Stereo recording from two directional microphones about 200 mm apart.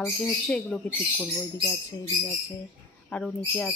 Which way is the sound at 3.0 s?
5° left (ahead or behind).